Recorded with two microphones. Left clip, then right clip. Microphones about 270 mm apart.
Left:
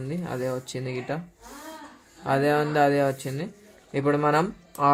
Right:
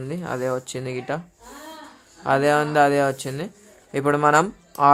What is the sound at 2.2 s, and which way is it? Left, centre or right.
Speech, right.